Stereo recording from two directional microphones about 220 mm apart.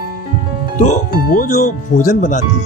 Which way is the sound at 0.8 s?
35° left (ahead or behind).